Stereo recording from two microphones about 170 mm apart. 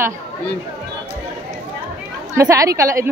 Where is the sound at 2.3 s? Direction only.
20° right (ahead or behind).